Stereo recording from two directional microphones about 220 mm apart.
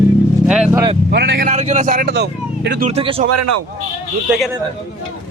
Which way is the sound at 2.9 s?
25° right (ahead or behind).